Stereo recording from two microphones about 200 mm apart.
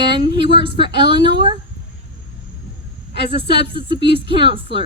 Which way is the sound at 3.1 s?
25° right (ahead or behind).